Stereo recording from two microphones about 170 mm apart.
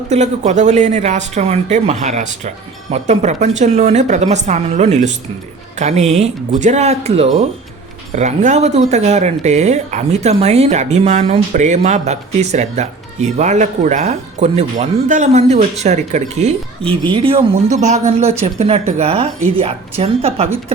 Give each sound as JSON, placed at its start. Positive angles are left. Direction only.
{"t": 0.1, "sound": "speech", "side_deg": -45}
{"t": 17.0, "sound": "speech", "side_deg": -30}